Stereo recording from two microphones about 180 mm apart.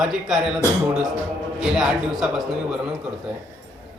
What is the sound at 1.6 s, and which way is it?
A man's voice, 5° right (ahead or behind).